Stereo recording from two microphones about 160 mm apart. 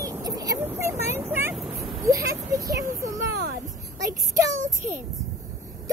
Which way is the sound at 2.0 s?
20° right (ahead or behind).